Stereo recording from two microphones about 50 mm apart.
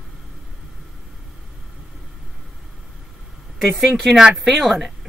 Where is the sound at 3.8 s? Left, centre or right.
Centre.